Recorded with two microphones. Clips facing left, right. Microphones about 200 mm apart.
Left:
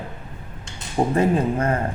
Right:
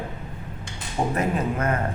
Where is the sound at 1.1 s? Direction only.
30° left (ahead or behind).